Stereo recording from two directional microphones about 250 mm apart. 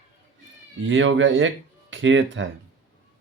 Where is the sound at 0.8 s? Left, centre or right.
Right.